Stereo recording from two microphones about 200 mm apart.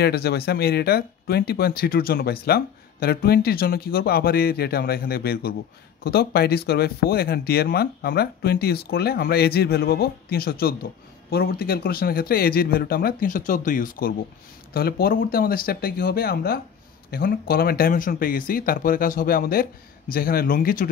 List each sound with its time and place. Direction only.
0.0 s speech: 55° left (ahead or behind)